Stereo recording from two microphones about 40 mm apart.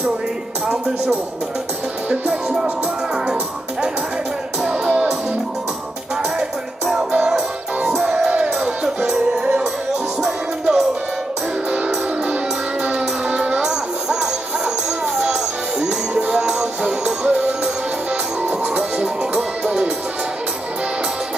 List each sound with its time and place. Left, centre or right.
0.7 s speech: centre
7.2 s music: centre
12.9 s music: centre
16.3 s music: centre
17.2 s music: right
18.8 s music: centre